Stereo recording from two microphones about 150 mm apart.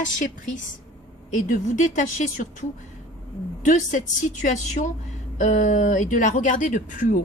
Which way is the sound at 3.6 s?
55° left (ahead or behind).